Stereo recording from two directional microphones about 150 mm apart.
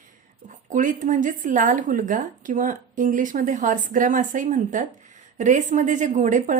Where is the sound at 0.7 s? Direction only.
60° right (ahead or behind).